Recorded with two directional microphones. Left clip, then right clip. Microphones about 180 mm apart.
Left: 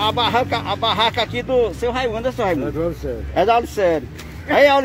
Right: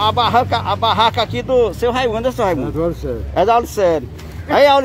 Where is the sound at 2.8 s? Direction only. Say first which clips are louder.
Right 3 dB; 70° right (ahead or behind).